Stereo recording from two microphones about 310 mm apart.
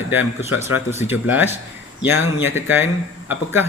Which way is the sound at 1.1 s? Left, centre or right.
Centre.